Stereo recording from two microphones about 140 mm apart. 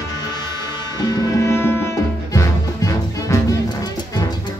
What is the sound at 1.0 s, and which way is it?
Music, 20° left (ahead or behind).